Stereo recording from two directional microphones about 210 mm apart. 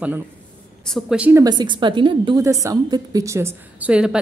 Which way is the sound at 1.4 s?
20° right (ahead or behind).